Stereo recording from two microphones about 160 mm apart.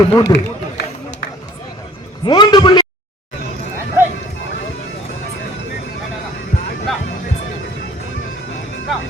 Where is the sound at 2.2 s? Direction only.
30° left (ahead or behind).